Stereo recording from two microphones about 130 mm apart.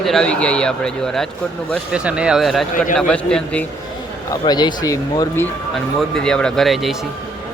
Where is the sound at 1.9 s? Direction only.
10° right (ahead or behind); by 3.6 s 5° left (ahead or behind).